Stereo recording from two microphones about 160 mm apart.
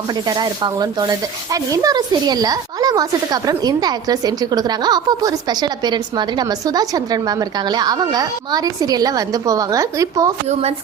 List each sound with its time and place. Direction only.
0.3 s speech: 25° right (ahead or behind)